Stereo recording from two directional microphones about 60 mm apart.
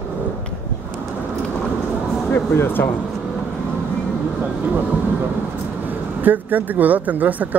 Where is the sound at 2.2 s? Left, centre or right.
Left.